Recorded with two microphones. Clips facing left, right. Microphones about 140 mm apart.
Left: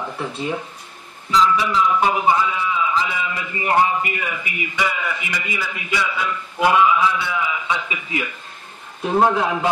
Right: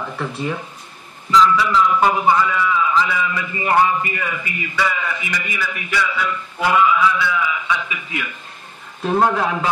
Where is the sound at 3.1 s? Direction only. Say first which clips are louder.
Right 3 dB; 20° left (ahead or behind).